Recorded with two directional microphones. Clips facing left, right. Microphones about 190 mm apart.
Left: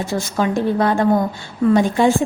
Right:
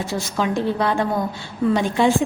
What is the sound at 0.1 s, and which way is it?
A woman's voice, 45° left (ahead or behind).